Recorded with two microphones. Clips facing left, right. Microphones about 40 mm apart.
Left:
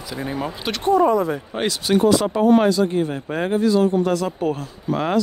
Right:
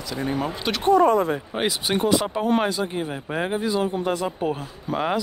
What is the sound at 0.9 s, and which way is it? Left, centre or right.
Speech, right.